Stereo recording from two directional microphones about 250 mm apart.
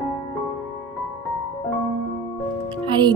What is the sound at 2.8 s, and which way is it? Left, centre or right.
Music, centre.